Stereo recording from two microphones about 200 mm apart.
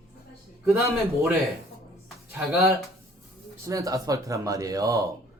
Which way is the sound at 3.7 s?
15° right (ahead or behind).